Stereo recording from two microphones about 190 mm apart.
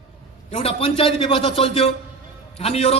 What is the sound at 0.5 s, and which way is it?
A man's voice, 30° left (ahead or behind).